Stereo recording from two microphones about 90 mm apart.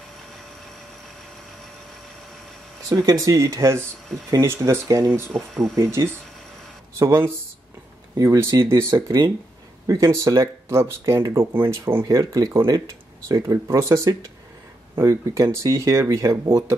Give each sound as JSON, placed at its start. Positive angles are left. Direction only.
{"t": 2.9, "sound": "speech", "side_deg": -45}
{"t": 5.3, "sound": "speech", "side_deg": 0}
{"t": 5.8, "sound": "speech", "side_deg": -30}
{"t": 12.2, "sound": "speech", "side_deg": -45}